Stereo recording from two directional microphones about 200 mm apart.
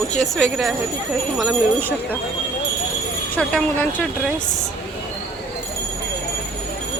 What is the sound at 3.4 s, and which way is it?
Speech, 5° left (ahead or behind).